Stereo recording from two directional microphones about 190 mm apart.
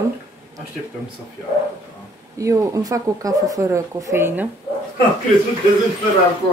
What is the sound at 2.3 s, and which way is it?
Speech, 15° right (ahead or behind).